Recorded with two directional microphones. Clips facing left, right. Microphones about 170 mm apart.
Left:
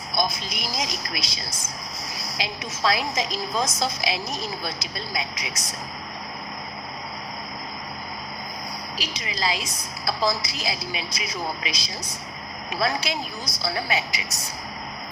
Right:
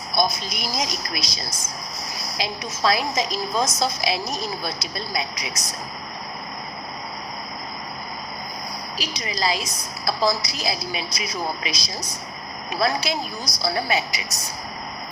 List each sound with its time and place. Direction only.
0.1 s a woman's voice: 40° right (ahead or behind)
9.0 s a woman's voice: 40° right (ahead or behind)